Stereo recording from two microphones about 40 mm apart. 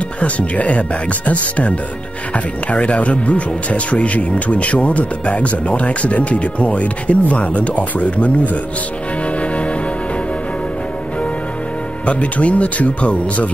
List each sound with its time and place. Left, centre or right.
0.2 s speech: left
12.1 s speech: left